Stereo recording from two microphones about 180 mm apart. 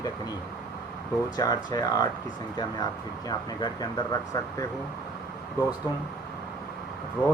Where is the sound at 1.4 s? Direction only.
20° left (ahead or behind).